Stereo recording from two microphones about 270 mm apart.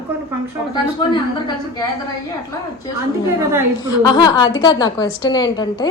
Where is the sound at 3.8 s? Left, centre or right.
Centre.